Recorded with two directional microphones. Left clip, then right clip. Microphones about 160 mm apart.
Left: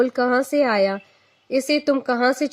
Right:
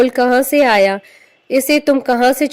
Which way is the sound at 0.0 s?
40° right (ahead or behind).